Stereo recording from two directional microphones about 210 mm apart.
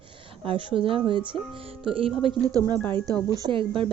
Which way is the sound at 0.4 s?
25° right (ahead or behind).